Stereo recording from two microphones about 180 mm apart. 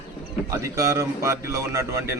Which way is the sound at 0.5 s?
15° right (ahead or behind).